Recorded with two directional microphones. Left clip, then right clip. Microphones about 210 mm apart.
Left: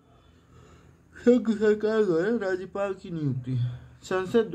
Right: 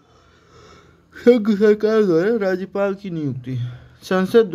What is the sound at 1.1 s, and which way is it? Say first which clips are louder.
Speech: right 8 dB; 40° right (ahead or behind).